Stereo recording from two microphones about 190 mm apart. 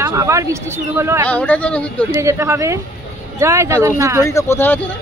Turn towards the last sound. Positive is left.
turn(degrees=10)  # may be behind; listen again after turning